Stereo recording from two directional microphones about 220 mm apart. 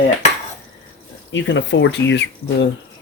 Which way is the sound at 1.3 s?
55° left (ahead or behind).